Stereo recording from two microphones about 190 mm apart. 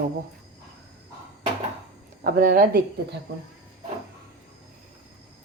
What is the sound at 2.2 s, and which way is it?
Speech, 50° right (ahead or behind).